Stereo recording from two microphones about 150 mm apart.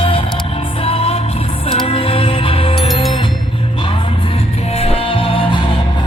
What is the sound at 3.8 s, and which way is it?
Music, 35° left (ahead or behind).